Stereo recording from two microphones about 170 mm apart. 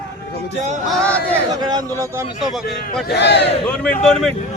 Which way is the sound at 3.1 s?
80° left.